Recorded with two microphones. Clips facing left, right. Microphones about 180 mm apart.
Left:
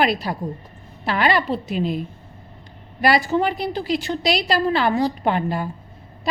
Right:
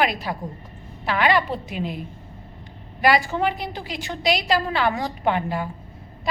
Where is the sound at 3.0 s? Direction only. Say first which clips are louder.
Left 2 dB; 35° left (ahead or behind).